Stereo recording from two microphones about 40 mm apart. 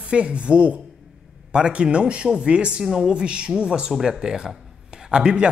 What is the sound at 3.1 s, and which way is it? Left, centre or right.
Speech, right.